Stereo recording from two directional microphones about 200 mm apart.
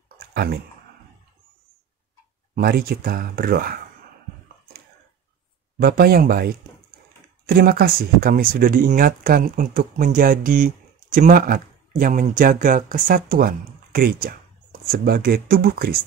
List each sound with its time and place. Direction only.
0.3 s a sound: 50° right (ahead or behind)
2.5 s a man's voice: 50° right (ahead or behind)
5.8 s a man's voice: 50° right (ahead or behind)